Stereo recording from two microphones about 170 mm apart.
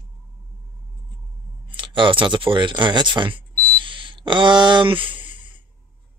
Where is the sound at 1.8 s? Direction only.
30° right (ahead or behind).